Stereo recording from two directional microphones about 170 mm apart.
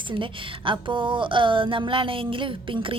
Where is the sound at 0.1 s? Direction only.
30° right (ahead or behind).